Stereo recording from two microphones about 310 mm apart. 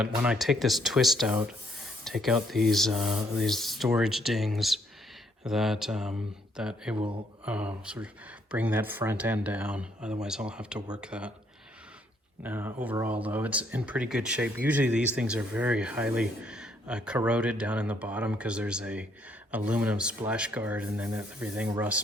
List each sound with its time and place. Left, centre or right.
0.0 s speech: centre
6.9 s speech: centre
7.4 s speech: centre
12.4 s speech: centre